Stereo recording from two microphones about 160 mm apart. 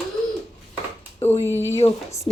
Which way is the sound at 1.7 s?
15° left (ahead or behind).